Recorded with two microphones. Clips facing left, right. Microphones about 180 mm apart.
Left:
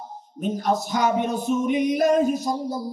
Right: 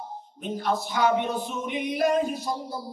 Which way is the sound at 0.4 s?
45° left (ahead or behind).